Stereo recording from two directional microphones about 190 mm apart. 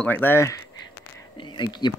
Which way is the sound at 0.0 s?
10° left (ahead or behind).